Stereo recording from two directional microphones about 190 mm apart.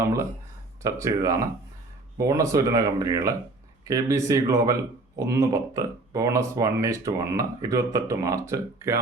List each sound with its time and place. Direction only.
0.0 s speech: 15° right (ahead or behind)